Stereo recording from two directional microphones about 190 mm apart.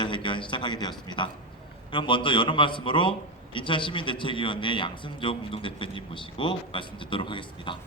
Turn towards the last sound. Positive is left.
turn(degrees=25)  # may be behind; listen again after turning